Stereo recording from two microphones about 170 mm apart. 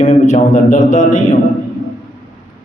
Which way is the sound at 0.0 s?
40° left (ahead or behind).